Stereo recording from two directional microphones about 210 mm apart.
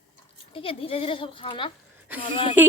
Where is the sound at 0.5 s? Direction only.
25° left (ahead or behind).